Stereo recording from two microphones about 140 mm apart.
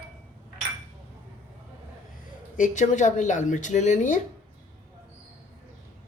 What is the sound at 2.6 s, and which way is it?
Speech, 60° left (ahead or behind).